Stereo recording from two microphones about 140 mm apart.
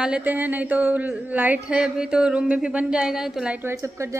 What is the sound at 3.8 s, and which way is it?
Speech, 20° right (ahead or behind).